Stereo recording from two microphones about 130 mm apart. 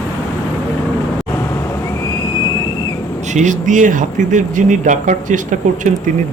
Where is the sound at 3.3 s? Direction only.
70° right (ahead or behind).